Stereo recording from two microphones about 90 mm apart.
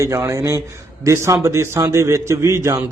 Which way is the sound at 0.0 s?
30° right (ahead or behind).